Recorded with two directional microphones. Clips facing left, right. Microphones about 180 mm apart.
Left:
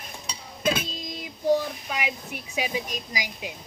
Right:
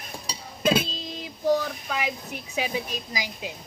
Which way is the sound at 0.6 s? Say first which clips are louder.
Right 3 dB; 15° left (ahead or behind).